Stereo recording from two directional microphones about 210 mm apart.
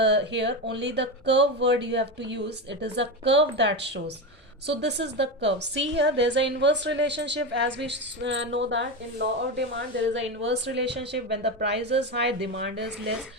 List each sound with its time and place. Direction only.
0.0 s a woman's voice: 55° right (ahead or behind)